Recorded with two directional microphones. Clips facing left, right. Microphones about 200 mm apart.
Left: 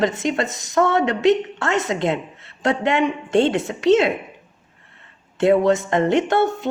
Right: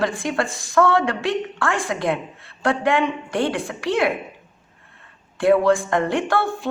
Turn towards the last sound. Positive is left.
turn(degrees=20)  # may be behind; listen again after turning